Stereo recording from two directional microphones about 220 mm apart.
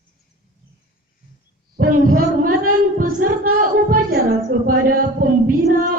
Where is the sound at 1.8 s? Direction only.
40° right (ahead or behind).